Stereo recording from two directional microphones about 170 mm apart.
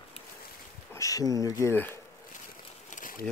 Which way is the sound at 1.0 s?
20° left (ahead or behind).